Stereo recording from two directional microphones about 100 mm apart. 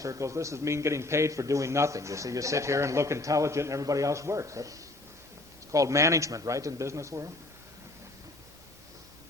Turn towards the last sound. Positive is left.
turn(degrees=-30)  # may be behind; listen again after turning